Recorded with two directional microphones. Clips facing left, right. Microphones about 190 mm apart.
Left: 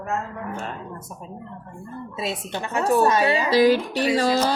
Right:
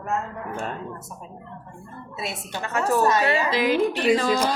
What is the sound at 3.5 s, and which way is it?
Speech, 40° left (ahead or behind).